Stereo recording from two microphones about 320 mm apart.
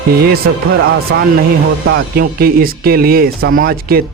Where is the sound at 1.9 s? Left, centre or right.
Right.